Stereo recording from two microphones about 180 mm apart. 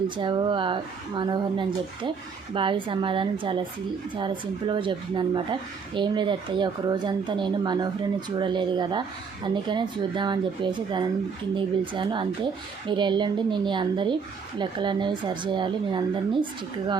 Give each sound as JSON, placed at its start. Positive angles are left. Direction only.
{"t": 0.2, "sound": "speech", "side_deg": -25}